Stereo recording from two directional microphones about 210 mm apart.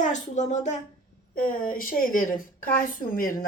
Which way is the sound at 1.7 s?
40° left (ahead or behind).